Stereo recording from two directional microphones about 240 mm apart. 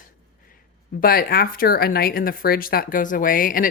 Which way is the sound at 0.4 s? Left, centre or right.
Left.